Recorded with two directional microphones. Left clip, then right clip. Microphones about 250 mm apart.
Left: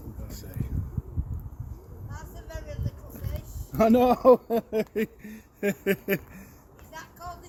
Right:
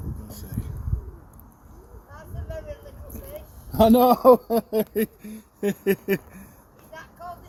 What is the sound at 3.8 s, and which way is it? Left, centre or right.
Speech, right.